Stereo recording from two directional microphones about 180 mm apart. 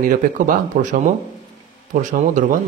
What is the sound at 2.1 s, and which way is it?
Speech, 45° right (ahead or behind).